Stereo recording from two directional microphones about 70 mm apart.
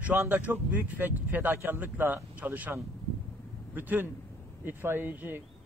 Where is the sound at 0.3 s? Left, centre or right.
Right.